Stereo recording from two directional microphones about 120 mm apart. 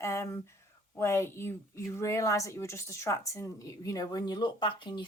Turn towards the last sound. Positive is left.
turn(degrees=40)  # may be behind; listen again after turning